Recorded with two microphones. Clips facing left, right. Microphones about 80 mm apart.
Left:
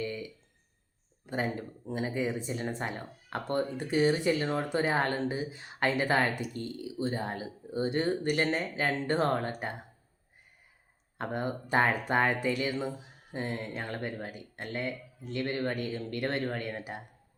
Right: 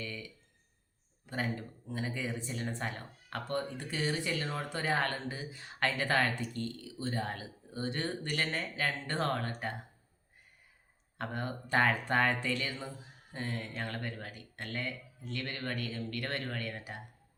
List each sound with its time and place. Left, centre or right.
0.0 s a sound: left
1.3 s speech: left
11.2 s speech: left